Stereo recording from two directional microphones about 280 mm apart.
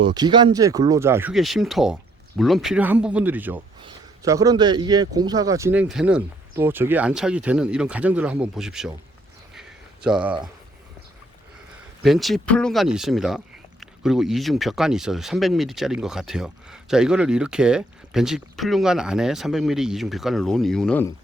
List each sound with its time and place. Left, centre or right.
0.0 s a man's voice: centre
9.6 s a sound: centre
12.0 s speech: centre